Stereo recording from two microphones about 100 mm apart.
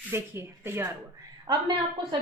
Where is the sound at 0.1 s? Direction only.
25° right (ahead or behind).